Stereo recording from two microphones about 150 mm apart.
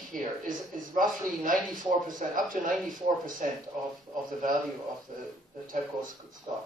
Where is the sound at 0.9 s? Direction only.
65° right (ahead or behind).